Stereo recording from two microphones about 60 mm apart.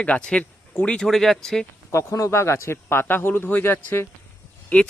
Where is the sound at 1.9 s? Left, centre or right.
Left.